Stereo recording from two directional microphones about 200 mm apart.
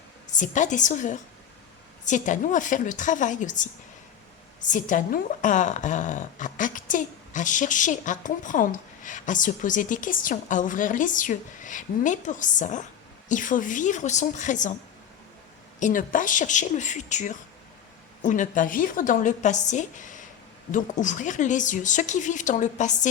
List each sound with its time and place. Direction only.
0.3 s a woman's voice: 40° left (ahead or behind)
15.8 s a woman's voice: 40° left (ahead or behind)